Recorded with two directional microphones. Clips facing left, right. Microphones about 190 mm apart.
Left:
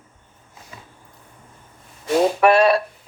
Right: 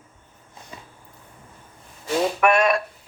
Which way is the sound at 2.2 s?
35° left (ahead or behind).